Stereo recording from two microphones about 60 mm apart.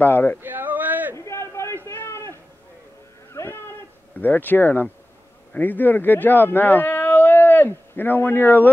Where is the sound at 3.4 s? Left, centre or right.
Left.